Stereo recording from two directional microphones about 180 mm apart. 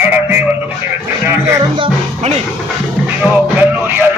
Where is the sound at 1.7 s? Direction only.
30° right (ahead or behind).